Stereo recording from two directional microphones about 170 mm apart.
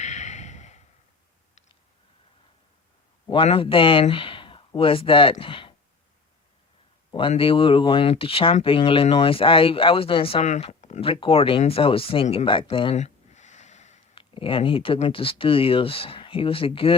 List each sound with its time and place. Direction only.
0.0 s a sound: 45° left (ahead or behind)
3.2 s speech: 30° left (ahead or behind)
7.1 s speech: 30° left (ahead or behind)
14.2 s speech: 30° left (ahead or behind)